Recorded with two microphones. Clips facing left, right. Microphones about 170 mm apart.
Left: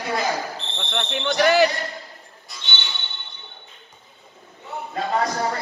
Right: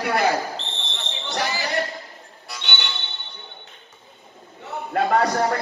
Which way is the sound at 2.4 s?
65° right (ahead or behind).